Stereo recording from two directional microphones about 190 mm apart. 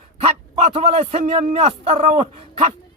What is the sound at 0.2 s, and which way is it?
A man's voice, 35° right (ahead or behind).